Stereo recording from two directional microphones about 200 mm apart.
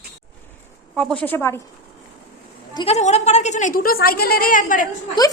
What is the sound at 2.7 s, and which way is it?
Speech, 30° left (ahead or behind).